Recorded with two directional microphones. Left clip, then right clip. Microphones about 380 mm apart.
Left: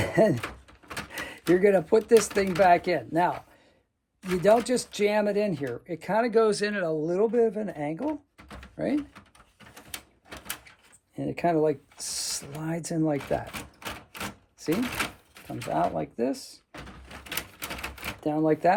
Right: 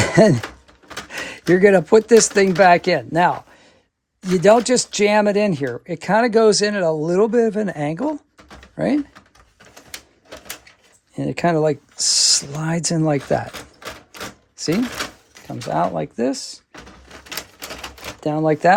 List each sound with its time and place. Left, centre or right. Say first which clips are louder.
0.0 s a sound: right 9 dB; right
1.5 s speech: right 9 dB; right
4.6 s speech: right 9 dB; right
11.1 s speech: right 7 dB; right
14.6 s speech: right 6 dB; right
18.2 s speech: right 7 dB; right